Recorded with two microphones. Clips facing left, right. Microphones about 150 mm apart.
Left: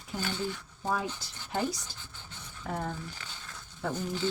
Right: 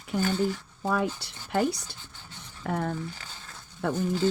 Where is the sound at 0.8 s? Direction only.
65° right (ahead or behind).